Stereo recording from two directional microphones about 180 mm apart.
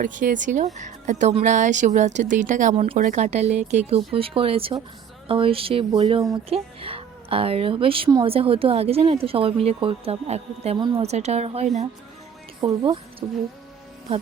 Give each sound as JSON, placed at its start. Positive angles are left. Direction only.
{"t": 0.0, "sound": "a woman's voice", "side_deg": -45}
{"t": 10.8, "sound": "a woman's voice", "side_deg": -25}
{"t": 11.0, "sound": "a woman's voice", "side_deg": -40}